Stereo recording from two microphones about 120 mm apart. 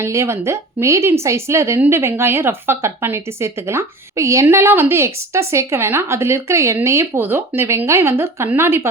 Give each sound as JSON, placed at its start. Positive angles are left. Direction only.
{"t": 0.0, "sound": "speech", "side_deg": -25}